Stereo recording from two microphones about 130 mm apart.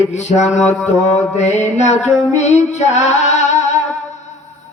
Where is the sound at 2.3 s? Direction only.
60° left (ahead or behind).